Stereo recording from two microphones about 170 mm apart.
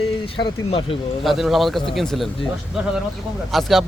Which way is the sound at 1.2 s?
Centre (ahead or behind).